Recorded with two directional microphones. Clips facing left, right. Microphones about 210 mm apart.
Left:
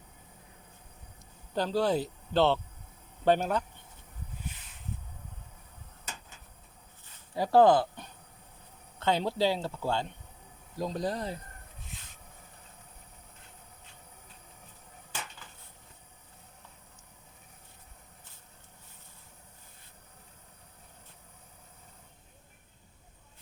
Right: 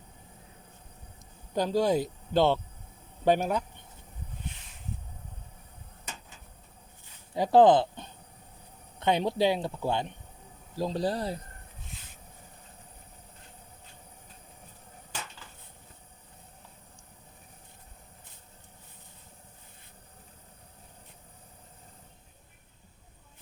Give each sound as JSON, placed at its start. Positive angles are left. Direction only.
{"t": 1.5, "sound": "speech", "side_deg": -15}
{"t": 7.3, "sound": "speech", "side_deg": -20}
{"t": 10.8, "sound": "speech", "side_deg": -30}